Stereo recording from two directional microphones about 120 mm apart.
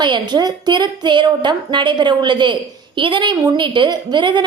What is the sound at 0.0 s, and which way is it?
A woman's voice, 40° right (ahead or behind).